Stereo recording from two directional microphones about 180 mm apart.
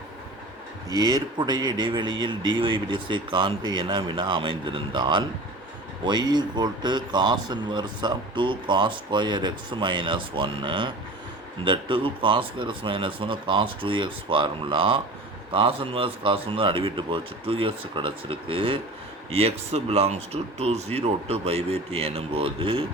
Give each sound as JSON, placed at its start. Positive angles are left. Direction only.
{"t": 0.9, "sound": "speech", "side_deg": -20}